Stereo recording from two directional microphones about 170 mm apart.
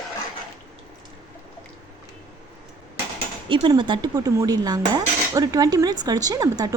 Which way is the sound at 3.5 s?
25° right (ahead or behind).